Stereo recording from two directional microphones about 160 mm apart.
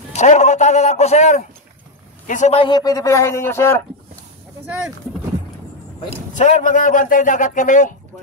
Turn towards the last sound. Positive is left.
turn(degrees=55)  # may be behind; listen again after turning